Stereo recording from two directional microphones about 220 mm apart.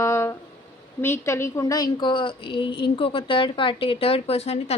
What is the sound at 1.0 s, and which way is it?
A woman's voice, 10° left (ahead or behind).